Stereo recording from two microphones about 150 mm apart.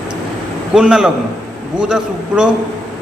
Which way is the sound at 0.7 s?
5° right (ahead or behind).